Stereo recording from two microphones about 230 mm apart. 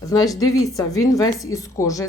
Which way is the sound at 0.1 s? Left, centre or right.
Centre.